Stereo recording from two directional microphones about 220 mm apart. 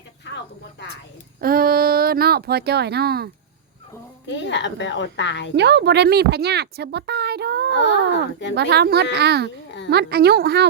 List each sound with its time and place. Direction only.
1.4 s speech: 40° right (ahead or behind)
4.3 s speech: 55° left (ahead or behind)
5.5 s a woman's voice: 50° right (ahead or behind)
7.7 s speech: 55° left (ahead or behind)
8.5 s a woman's voice: 50° right (ahead or behind)